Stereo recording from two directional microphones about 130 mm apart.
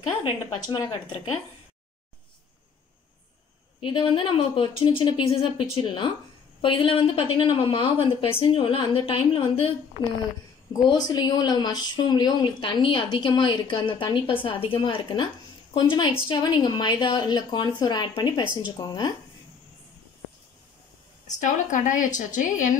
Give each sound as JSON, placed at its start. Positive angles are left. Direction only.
{"t": 0.0, "sound": "a woman's voice", "side_deg": 45}
{"t": 0.7, "sound": "speech", "side_deg": 25}
{"t": 3.8, "sound": "a woman's voice", "side_deg": 40}
{"t": 10.7, "sound": "a woman's voice", "side_deg": 30}
{"t": 21.3, "sound": "a woman's voice", "side_deg": 75}